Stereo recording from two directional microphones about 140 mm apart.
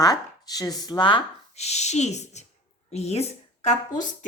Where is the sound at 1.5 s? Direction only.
50° left (ahead or behind).